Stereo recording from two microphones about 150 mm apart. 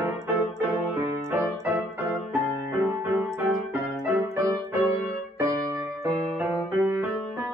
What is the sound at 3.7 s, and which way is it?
Music, 10° right (ahead or behind).